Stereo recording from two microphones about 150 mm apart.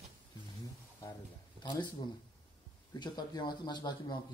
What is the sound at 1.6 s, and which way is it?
Speech, 30° left (ahead or behind).